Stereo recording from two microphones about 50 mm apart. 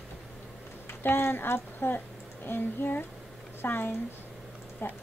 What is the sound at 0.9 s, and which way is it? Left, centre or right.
Speech, left.